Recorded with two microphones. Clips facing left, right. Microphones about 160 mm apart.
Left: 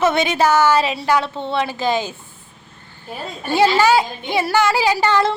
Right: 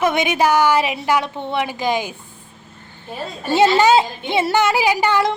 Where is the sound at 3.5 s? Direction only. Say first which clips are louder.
Right 1 dB; 20° right (ahead or behind).